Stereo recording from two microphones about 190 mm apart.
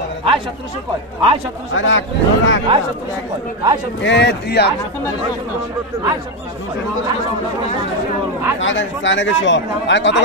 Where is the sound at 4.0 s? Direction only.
65° left (ahead or behind).